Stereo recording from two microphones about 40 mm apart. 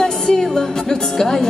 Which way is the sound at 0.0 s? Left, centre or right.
Centre.